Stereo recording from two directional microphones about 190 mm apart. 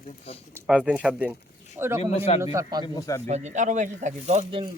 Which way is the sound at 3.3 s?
40° right (ahead or behind).